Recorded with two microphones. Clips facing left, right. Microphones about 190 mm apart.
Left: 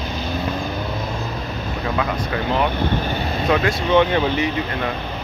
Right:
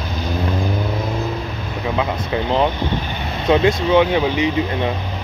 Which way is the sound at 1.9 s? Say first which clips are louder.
Right 3 dB; 20° right (ahead or behind).